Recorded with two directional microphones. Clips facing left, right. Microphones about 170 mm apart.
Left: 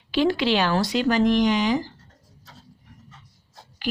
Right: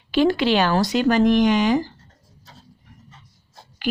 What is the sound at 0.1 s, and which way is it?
Speech, 50° right (ahead or behind).